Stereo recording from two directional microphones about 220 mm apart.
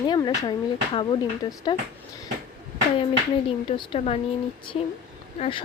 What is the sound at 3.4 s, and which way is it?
Speech, 25° left (ahead or behind).